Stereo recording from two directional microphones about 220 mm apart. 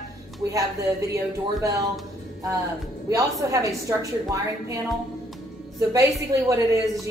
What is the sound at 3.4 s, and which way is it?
A woman's voice, 15° right (ahead or behind).